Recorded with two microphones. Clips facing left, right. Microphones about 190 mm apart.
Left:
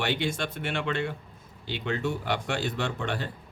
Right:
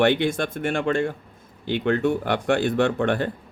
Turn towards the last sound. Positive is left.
turn(degrees=-55)  # may be behind; listen again after turning